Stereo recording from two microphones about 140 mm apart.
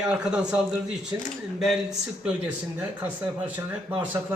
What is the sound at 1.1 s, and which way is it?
Speech, 20° right (ahead or behind).